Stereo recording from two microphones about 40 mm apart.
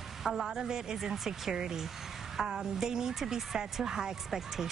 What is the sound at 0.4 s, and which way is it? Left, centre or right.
A woman's voice, centre.